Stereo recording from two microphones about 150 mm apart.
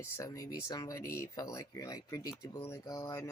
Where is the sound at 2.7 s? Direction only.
20° left (ahead or behind).